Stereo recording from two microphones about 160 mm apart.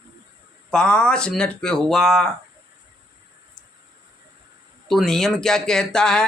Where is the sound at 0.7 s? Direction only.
5° left (ahead or behind).